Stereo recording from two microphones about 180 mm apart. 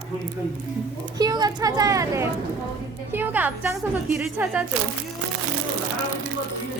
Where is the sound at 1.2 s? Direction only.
20° right (ahead or behind).